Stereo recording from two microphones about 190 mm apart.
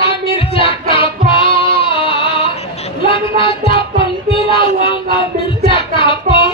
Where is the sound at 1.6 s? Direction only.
30° left (ahead or behind).